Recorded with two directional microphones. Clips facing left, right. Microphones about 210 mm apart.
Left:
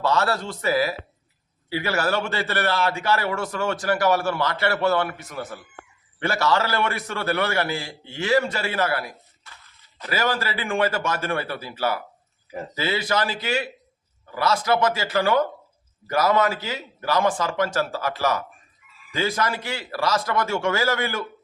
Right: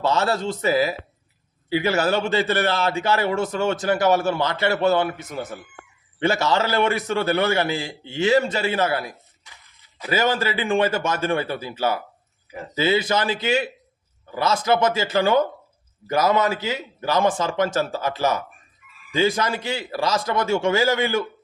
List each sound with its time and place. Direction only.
0.0 s a man's voice: 20° right (ahead or behind)